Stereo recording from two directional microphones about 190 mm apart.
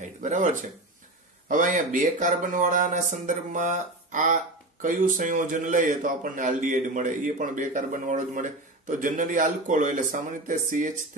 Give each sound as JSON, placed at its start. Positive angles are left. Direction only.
{"t": 0.0, "sound": "a man's voice", "side_deg": -40}